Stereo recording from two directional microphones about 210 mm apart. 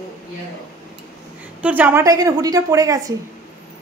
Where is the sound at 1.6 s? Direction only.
10° right (ahead or behind).